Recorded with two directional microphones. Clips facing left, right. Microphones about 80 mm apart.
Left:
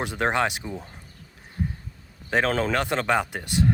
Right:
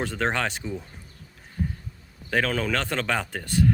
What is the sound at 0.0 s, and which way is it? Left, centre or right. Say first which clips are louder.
Speech: left 2 dB; centre.